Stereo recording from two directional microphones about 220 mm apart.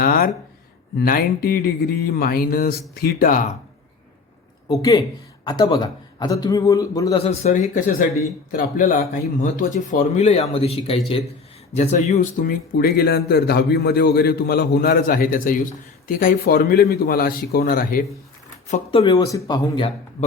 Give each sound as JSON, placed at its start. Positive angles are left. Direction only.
{"t": 0.0, "sound": "a sound", "side_deg": 40}
{"t": 0.9, "sound": "speech", "side_deg": 45}
{"t": 4.7, "sound": "a man's voice", "side_deg": 15}
{"t": 7.2, "sound": "speech", "side_deg": 30}
{"t": 18.7, "sound": "speech", "side_deg": 25}